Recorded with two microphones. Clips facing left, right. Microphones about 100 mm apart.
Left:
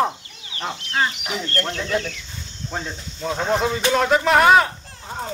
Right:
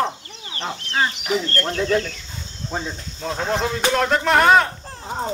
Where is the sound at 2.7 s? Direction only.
Centre (ahead or behind).